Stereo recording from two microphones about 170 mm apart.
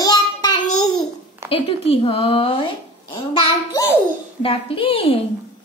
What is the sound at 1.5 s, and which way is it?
A woman's voice, 35° left (ahead or behind).